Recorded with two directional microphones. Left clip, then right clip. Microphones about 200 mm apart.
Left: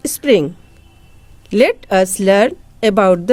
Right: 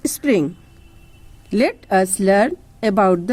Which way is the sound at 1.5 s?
30° left (ahead or behind).